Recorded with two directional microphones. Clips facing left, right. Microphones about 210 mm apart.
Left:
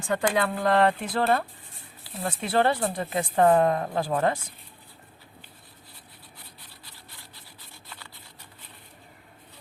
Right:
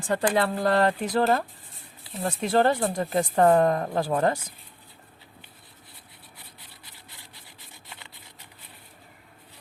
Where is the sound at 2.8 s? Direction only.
45° right (ahead or behind).